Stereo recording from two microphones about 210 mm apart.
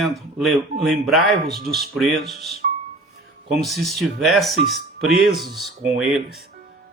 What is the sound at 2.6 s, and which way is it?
Music, 40° right (ahead or behind).